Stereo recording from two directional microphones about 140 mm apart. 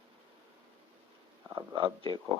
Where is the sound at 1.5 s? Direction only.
40° right (ahead or behind).